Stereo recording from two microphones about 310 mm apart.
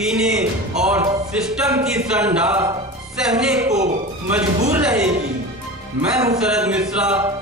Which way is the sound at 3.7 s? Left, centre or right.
Right.